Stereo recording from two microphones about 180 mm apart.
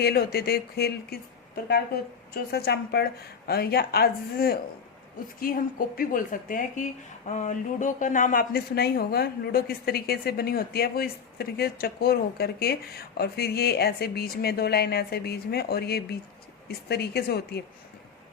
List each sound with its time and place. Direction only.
0.0 s speech: 65° left (ahead or behind)
2.3 s speech: 60° left (ahead or behind)